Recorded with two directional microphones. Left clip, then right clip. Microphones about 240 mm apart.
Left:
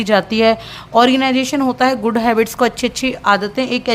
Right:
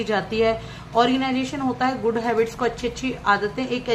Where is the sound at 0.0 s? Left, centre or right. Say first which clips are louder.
Left 8 dB; left.